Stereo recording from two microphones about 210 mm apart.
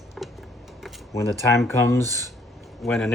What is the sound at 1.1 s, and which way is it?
Speech, 15° left (ahead or behind).